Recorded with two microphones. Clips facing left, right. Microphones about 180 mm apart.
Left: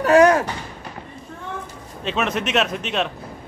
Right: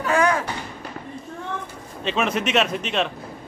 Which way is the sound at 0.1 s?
40° left (ahead or behind).